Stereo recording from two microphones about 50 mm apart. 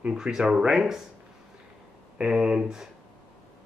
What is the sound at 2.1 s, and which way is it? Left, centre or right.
Speech, centre.